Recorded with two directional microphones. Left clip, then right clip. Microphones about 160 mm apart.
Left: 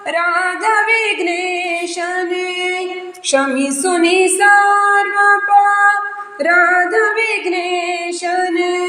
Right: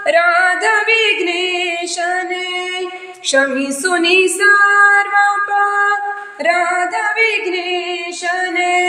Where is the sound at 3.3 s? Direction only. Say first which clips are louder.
Even; centre (ahead or behind).